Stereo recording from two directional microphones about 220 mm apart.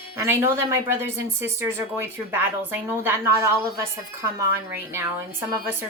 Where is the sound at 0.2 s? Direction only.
10° right (ahead or behind).